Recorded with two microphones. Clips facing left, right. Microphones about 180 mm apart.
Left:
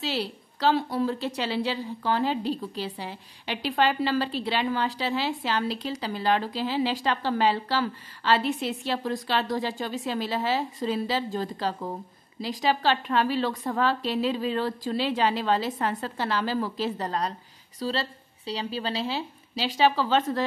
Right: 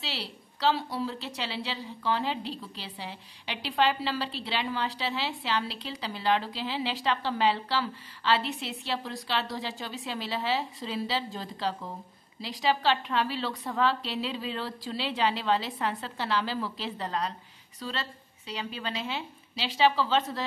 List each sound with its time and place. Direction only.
0.0 s a woman's voice: 45° left (ahead or behind)